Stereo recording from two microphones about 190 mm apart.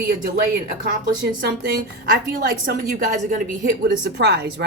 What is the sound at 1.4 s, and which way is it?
A woman's voice, 50° right (ahead or behind).